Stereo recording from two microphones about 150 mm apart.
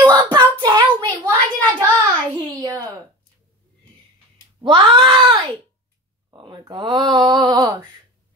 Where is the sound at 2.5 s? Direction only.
25° right (ahead or behind).